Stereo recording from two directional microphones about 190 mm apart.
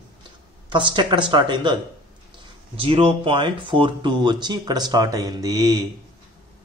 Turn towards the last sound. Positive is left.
turn(degrees=-20)  # may be behind; listen again after turning